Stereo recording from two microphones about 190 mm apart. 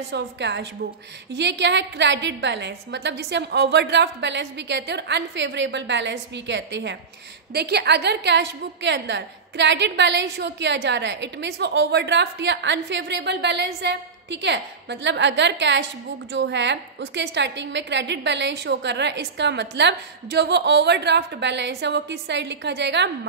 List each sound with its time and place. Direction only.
0.1 s a woman's voice: 65° right (ahead or behind)